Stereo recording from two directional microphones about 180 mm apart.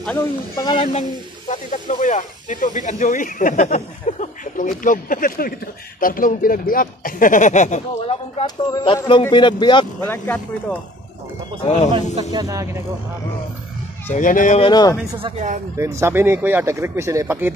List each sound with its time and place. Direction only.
0.0 s speech: 15° left (ahead or behind)
1.5 s speech: 40° left (ahead or behind)
8.5 s speech: 25° left (ahead or behind)
9.9 s speech: 10° left (ahead or behind)
11.6 s a man's voice: 40° left (ahead or behind)
12.2 s speech: 20° right (ahead or behind)
14.0 s speech: 45° left (ahead or behind)
14.6 s speech: 20° left (ahead or behind)
15.8 s speech: 15° right (ahead or behind)